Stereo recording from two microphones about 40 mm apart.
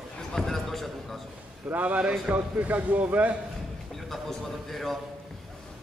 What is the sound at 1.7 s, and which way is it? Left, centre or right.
Speech, right.